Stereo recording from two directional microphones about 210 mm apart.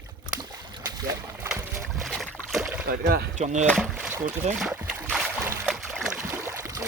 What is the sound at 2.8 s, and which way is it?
Speech, 45° right (ahead or behind).